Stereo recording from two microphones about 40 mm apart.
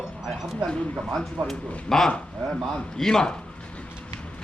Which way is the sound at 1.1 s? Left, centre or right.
Centre.